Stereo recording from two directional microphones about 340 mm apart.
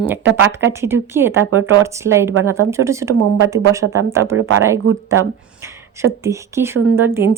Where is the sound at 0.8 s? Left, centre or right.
Centre.